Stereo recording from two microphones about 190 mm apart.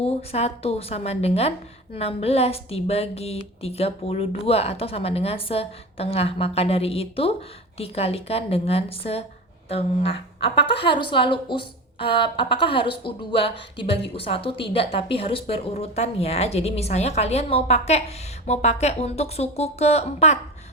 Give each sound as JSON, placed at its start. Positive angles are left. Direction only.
{"t": 0.0, "sound": "a woman's voice", "side_deg": 30}